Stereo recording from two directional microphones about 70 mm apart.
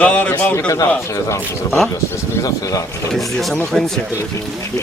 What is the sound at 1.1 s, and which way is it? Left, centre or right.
Speech, left.